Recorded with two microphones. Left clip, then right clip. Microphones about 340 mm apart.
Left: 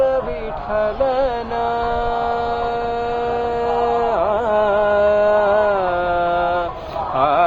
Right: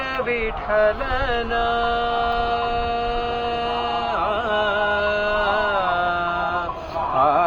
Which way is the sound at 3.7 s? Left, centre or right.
Centre.